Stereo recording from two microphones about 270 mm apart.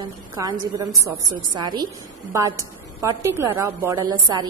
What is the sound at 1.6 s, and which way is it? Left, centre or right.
A woman's voice, centre.